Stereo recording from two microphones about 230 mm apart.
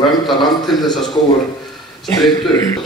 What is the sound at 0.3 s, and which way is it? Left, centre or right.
Speech, centre.